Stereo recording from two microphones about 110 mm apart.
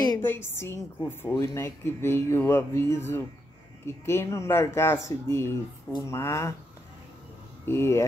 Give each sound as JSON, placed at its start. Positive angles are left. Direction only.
{"t": 0.2, "sound": "speech", "side_deg": 20}
{"t": 1.3, "sound": "speech", "side_deg": 30}
{"t": 7.6, "sound": "speech", "side_deg": 25}